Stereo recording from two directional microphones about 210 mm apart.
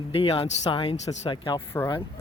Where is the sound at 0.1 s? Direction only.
25° left (ahead or behind).